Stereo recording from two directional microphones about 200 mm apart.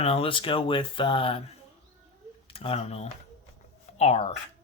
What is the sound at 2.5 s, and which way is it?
Speech, 30° left (ahead or behind).